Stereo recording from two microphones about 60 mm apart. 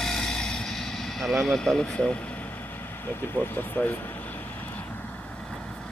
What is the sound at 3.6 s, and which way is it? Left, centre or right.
Speech, left.